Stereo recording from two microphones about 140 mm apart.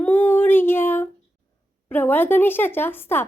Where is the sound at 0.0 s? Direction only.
15° left (ahead or behind).